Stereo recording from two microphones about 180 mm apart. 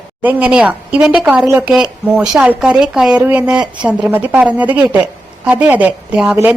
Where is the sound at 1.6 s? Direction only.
5° right (ahead or behind).